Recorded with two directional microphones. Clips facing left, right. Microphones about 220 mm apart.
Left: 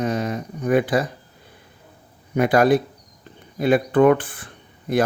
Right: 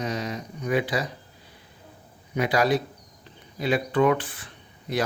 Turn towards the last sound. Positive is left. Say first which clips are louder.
# left 7 dB
turn(degrees=50)  # may be behind; listen again after turning